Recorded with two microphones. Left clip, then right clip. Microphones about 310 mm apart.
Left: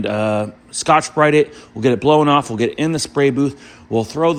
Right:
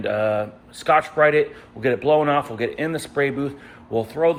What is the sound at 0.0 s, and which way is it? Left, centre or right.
Speech, centre.